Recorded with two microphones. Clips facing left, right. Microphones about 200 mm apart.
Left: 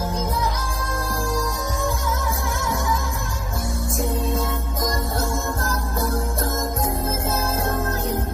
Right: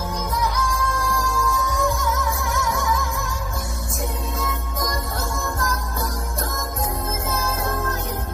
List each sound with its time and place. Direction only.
0.9 s music: 30° left (ahead or behind)
4.4 s music: 30° left (ahead or behind)
7.2 s music: 30° left (ahead or behind)